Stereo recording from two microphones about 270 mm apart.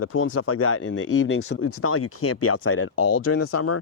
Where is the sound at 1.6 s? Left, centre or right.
Left.